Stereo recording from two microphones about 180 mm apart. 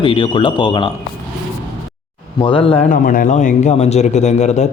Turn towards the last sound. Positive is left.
turn(degrees=40)  # may be behind; listen again after turning